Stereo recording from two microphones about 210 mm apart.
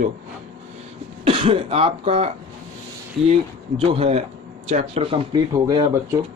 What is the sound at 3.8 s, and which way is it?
Speech, 30° right (ahead or behind).